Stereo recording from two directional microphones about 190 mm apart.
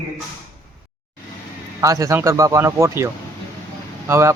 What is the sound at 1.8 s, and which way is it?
A man's voice, 15° right (ahead or behind).